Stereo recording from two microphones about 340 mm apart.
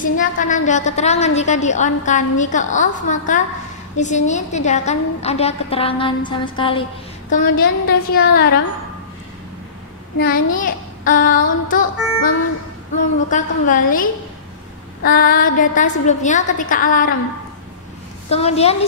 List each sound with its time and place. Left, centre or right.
0.0 s a woman's voice: left
10.1 s a woman's voice: left
13.3 s a woman's voice: left
18.3 s a woman's voice: centre